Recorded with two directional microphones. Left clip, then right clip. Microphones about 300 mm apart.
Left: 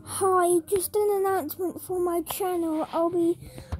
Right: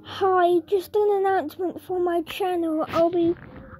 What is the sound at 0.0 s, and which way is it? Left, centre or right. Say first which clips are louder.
A woman's voice: right 3 dB; centre.